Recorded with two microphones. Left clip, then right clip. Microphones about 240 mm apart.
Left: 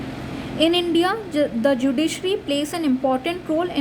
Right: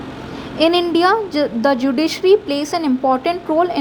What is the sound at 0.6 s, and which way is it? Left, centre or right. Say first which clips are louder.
A woman's voice: right 5 dB; centre.